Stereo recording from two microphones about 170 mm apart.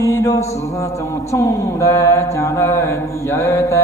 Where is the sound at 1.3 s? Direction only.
20° left (ahead or behind).